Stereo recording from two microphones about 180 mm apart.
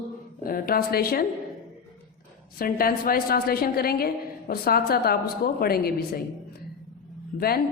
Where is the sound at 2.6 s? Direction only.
55° left (ahead or behind).